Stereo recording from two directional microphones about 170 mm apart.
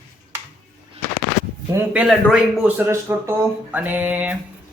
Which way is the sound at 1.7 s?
5° right (ahead or behind).